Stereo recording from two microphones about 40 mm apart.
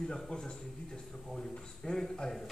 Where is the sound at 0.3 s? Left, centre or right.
Left.